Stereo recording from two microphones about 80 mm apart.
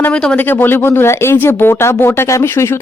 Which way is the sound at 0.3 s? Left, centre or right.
Left.